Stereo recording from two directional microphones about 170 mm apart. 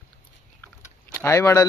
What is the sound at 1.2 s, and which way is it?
Speech, 15° left (ahead or behind).